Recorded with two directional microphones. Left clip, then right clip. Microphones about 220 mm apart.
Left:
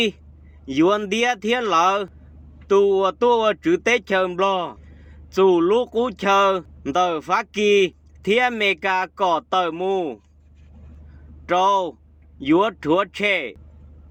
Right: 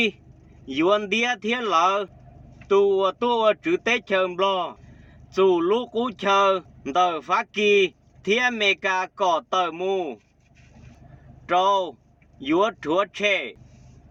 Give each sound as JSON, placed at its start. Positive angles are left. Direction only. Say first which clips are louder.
{"t": 0.6, "sound": "speech", "louder": "left 2 dB", "side_deg": 35}
{"t": 11.4, "sound": "speech", "louder": "left 2 dB", "side_deg": 35}